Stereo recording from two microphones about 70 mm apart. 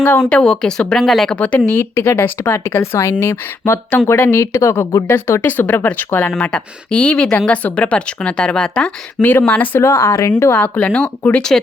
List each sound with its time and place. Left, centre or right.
0.2 s speech: centre
1.4 s speech: left
3.6 s speech: left
6.3 s speech: centre
9.5 s speech: left
9.8 s speech: left
10.5 s speech: left